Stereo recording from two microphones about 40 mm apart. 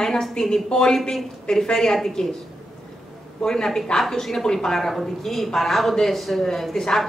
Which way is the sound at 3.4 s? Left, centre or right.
Centre.